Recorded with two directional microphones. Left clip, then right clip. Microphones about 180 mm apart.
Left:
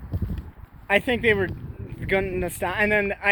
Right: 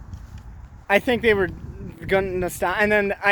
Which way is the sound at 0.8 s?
30° right (ahead or behind).